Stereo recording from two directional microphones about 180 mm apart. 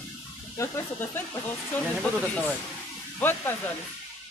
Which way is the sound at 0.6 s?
10° left (ahead or behind).